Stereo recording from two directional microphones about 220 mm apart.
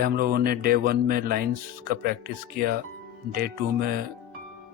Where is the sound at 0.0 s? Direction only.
40° right (ahead or behind).